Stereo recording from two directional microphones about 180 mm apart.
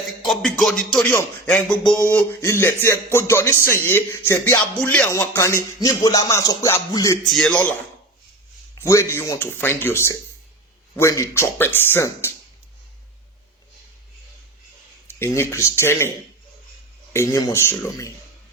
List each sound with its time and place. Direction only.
0.2 s a sound: centre (ahead or behind)
1.9 s speech: 5° left (ahead or behind)
5.8 s music: 20° left (ahead or behind)
7.3 s a sound: 5° left (ahead or behind)
8.7 s speech: 15° left (ahead or behind)
15.0 s speech: 15° left (ahead or behind)